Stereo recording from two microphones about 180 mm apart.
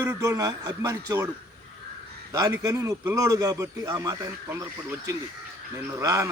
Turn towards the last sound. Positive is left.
turn(degrees=-15)  # may be behind; listen again after turning